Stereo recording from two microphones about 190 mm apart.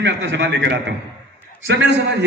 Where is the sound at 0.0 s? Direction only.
65° right (ahead or behind).